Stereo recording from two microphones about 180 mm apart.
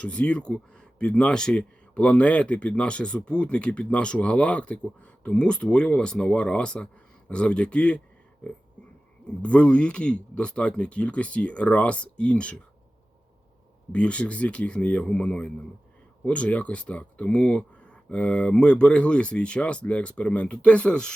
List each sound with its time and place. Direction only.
0.0 s speech: 5° left (ahead or behind)
9.4 s speech: 5° left (ahead or behind)
13.9 s speech: 5° left (ahead or behind)